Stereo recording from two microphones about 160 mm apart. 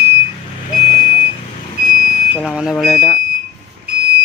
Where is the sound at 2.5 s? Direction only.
5° right (ahead or behind).